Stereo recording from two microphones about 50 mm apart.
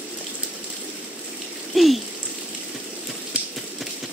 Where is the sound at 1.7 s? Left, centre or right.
Centre.